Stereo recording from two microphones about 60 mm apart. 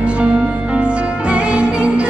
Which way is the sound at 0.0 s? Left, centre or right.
Centre.